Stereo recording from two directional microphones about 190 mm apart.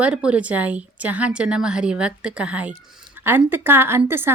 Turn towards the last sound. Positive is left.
turn(degrees=-10)  # may be behind; listen again after turning